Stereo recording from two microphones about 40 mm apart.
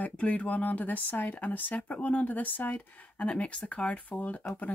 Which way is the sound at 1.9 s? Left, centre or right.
Left.